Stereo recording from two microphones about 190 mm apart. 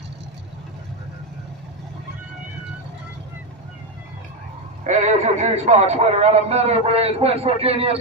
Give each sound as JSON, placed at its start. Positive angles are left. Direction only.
{"t": 4.8, "sound": "speech", "side_deg": -40}